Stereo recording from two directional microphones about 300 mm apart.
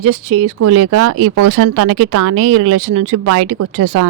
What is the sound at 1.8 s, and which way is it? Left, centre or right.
A woman's voice, right.